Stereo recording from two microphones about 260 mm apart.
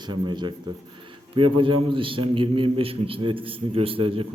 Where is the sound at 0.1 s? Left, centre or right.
Centre.